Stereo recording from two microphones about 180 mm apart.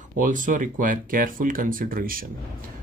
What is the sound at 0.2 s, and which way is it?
Speech, 45° right (ahead or behind).